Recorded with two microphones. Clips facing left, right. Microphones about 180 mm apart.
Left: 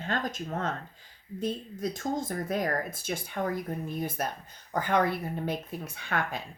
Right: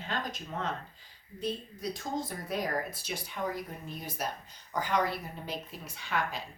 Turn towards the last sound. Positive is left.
turn(degrees=55)  # may be behind; listen again after turning